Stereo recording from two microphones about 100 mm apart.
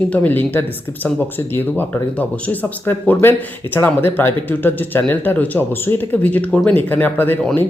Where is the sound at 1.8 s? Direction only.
15° left (ahead or behind).